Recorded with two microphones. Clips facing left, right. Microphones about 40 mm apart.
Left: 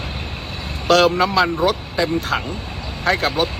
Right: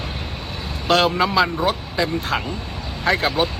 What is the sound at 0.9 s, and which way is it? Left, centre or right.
Speech, right.